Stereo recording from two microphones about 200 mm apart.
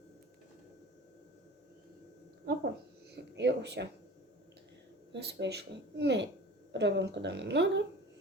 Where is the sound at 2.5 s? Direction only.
50° right (ahead or behind).